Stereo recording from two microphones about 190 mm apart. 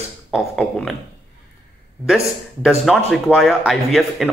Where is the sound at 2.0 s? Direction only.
Centre (ahead or behind).